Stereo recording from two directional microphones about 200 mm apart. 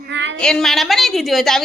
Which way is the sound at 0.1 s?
65° right (ahead or behind).